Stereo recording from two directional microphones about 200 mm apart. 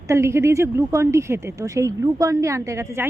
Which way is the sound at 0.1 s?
15° right (ahead or behind).